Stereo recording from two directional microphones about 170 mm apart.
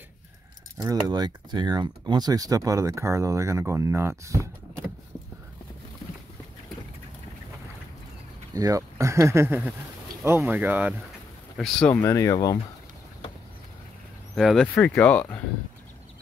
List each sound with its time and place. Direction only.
0.8 s speech: 20° right (ahead or behind)
8.5 s speech: 20° right (ahead or behind)
11.5 s speech: 5° left (ahead or behind); by 12.5 s 20° left (ahead or behind)
14.3 s speech: centre (ahead or behind)